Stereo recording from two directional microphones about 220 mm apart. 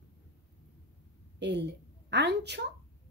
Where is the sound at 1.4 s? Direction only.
50° right (ahead or behind).